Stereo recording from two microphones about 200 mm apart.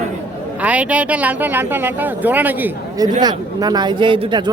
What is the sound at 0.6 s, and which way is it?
Speech, 5° right (ahead or behind).